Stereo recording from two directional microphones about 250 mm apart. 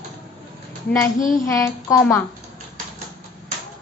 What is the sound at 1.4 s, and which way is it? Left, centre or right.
Speech, centre.